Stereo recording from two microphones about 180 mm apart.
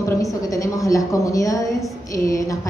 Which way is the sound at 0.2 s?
20° left (ahead or behind).